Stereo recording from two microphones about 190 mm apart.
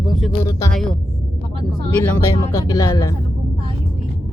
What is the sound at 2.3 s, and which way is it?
Speech, 20° left (ahead or behind).